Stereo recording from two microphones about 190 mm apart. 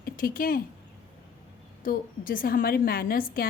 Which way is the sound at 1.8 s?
50° left (ahead or behind).